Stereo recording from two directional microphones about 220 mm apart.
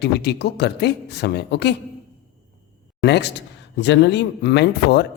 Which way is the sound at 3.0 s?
50° left (ahead or behind).